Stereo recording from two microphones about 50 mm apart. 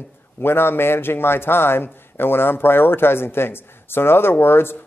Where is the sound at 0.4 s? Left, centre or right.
Left.